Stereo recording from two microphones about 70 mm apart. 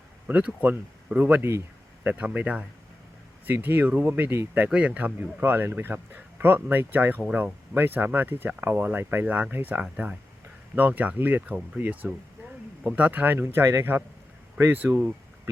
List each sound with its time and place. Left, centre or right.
0.3 s speech: right
1.4 s speech: right
2.0 s speech: right
4.3 s speech: right
4.7 s speech: centre
5.4 s speech: right